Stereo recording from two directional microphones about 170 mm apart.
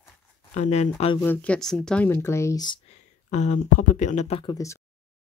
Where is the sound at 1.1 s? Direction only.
10° left (ahead or behind).